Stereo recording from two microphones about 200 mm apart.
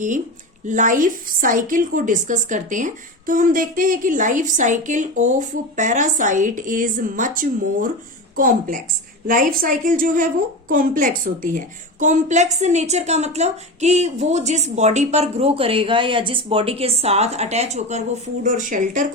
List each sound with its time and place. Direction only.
0.7 s a woman's voice: 40° right (ahead or behind)